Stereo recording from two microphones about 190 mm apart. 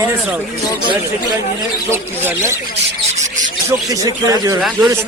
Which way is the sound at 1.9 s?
10° right (ahead or behind).